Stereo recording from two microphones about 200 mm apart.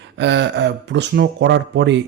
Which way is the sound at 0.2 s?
60° right (ahead or behind).